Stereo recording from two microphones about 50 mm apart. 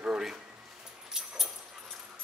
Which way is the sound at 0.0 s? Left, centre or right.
Centre.